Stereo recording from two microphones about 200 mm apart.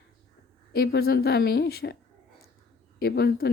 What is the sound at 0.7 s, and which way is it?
Speech, 50° left (ahead or behind).